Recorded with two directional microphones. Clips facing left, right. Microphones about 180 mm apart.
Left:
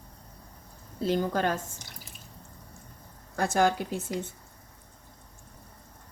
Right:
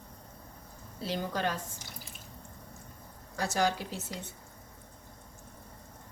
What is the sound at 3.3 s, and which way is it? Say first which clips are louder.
Speech: left 5 dB; 55° left (ahead or behind).